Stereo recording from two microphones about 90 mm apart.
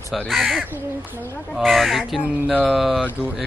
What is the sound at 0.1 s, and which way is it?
Speech, centre (ahead or behind).